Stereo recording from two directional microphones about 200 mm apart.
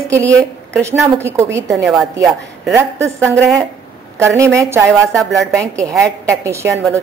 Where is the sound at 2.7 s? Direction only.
15° right (ahead or behind).